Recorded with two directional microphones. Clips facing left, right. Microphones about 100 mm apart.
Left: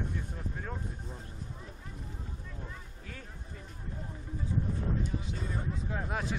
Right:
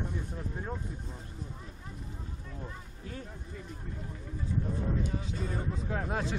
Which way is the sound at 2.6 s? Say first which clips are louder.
Right 3 dB; 35° right (ahead or behind).